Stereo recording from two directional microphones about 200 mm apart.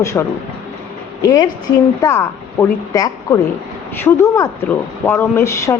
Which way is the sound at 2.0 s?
10° left (ahead or behind).